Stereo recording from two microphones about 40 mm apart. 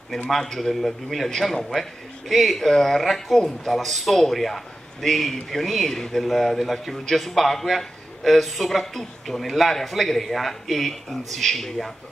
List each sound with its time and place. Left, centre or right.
0.3 s a man's voice: centre